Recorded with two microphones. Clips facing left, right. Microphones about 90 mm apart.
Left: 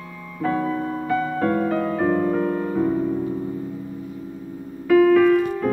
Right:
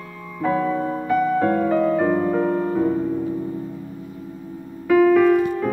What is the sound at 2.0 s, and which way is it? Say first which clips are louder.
Music: right 1 dB; 5° right (ahead or behind).